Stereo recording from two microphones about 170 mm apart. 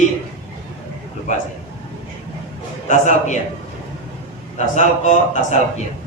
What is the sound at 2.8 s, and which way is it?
Speech, 45° left (ahead or behind).